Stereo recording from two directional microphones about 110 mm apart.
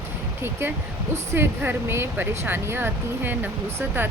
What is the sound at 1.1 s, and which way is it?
A woman's voice, 25° right (ahead or behind).